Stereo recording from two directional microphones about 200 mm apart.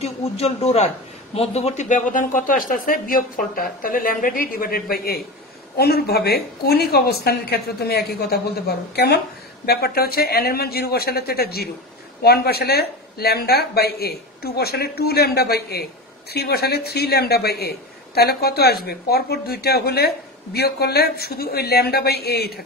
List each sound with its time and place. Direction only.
0.0 s speech: 30° left (ahead or behind); by 22.6 s 50° left (ahead or behind)